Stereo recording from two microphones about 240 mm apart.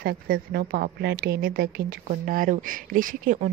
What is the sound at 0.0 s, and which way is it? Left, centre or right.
A woman's voice, right.